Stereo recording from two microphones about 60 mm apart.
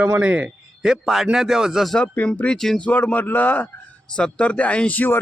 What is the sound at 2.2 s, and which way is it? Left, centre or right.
Speech, left.